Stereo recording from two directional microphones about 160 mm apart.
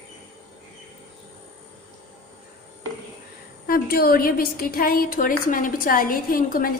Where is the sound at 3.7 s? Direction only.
70° left (ahead or behind).